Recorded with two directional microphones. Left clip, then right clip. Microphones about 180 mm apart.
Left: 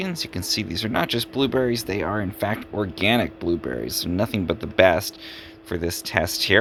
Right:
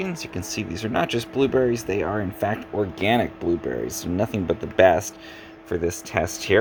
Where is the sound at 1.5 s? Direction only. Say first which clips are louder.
Right 2 dB; 15° left (ahead or behind).